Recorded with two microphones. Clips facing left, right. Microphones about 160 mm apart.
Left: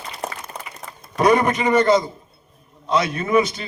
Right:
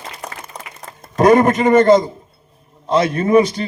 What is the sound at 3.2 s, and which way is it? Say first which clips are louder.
Speech: right 6 dB; 35° right (ahead or behind).